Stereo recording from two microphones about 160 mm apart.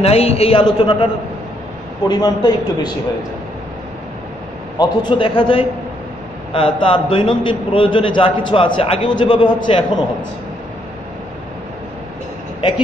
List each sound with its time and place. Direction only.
0.0 s a man's voice: 40° left (ahead or behind)
2.0 s a man's voice: 25° left (ahead or behind)
4.7 s a man's voice: 30° left (ahead or behind)